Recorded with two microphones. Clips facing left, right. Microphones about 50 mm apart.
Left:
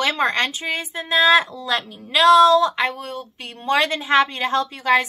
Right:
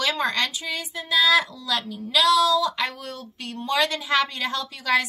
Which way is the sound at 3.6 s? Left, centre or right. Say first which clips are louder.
Left 4 dB; left.